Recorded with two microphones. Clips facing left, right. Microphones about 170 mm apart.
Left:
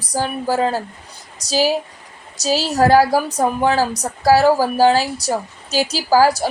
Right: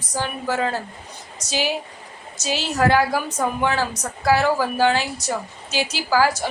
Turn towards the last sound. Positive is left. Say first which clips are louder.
# left 5 dB
turn(degrees=35)  # may be behind; listen again after turning